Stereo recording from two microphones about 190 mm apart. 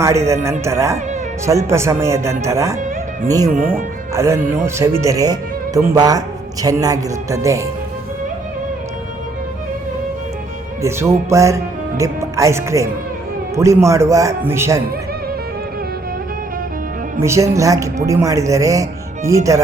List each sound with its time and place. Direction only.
0.0 s speech: 15° right (ahead or behind)
3.5 s speech: 45° right (ahead or behind)
4.1 s speech: 15° right (ahead or behind)
11.3 s speech: 15° right (ahead or behind)
17.2 s speech: 15° right (ahead or behind)